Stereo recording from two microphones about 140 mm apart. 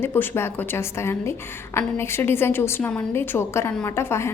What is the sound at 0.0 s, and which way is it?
A woman's voice, 15° left (ahead or behind).